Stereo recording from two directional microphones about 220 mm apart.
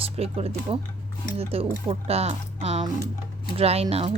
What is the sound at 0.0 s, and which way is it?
Speech, 25° right (ahead or behind).